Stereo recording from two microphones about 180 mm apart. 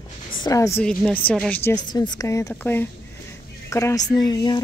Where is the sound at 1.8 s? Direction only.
25° left (ahead or behind).